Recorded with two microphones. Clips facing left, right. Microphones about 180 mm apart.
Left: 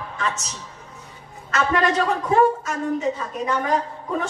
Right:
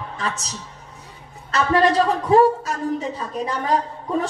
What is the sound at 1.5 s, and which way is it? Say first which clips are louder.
A woman's voice: right 3 dB; 35° right (ahead or behind).